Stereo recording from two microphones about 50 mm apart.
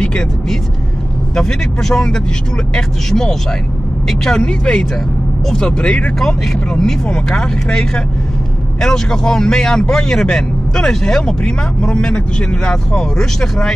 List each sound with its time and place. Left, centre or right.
0.0 s speech: centre
6.1 s speech: centre